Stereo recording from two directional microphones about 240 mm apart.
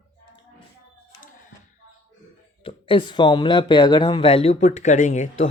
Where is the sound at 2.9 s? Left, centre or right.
Centre.